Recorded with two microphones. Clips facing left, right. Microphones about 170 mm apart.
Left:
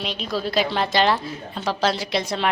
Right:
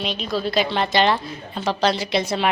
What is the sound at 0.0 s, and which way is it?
A woman's voice, 5° left (ahead or behind).